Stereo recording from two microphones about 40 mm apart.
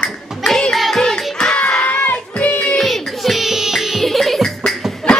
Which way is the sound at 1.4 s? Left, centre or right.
Left.